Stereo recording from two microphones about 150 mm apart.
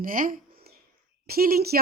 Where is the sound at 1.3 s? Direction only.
85° right.